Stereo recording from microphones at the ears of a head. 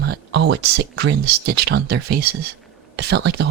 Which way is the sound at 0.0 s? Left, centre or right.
Right.